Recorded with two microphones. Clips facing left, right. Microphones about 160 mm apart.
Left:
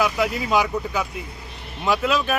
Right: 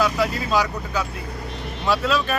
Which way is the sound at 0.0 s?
15° left (ahead or behind).